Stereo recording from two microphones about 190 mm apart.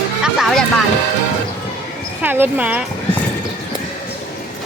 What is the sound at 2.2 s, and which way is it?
Speech, 10° right (ahead or behind).